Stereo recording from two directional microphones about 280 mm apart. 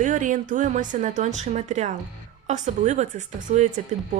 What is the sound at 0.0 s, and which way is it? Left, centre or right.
A woman's voice, right.